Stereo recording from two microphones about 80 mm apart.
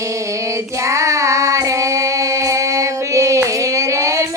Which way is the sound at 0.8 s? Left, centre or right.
Right.